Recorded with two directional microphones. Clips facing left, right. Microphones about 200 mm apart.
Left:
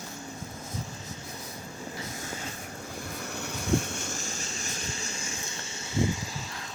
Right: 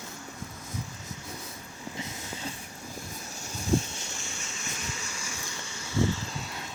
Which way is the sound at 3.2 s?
65° left (ahead or behind).